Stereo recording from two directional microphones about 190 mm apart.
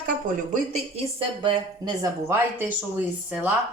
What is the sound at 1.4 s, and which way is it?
Speech, 20° right (ahead or behind).